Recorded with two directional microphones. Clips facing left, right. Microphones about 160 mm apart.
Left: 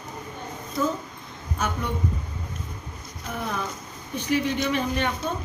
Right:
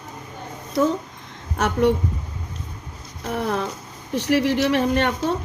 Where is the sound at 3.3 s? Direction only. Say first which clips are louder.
Right 6 dB; 65° right (ahead or behind).